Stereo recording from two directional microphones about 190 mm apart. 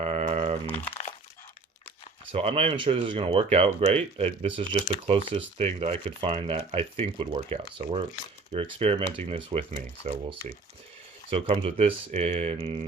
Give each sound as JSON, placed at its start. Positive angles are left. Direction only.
{"t": 0.0, "sound": "typing", "side_deg": -35}
{"t": 0.7, "sound": "speech", "side_deg": 10}
{"t": 2.3, "sound": "speech", "side_deg": -30}